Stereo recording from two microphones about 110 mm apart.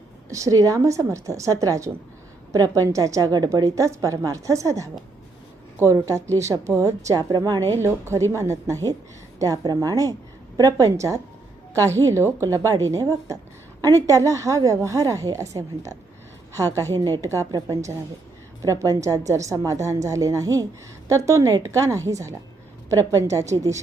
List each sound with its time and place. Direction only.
0.3 s a woman's voice: 30° right (ahead or behind)
7.8 s a woman's voice: 25° right (ahead or behind)
17.2 s a woman's voice: 30° right (ahead or behind)